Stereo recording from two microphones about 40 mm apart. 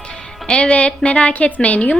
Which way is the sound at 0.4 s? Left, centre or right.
Left.